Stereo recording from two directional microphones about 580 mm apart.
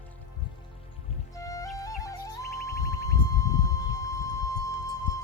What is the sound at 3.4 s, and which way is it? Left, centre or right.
Music, centre.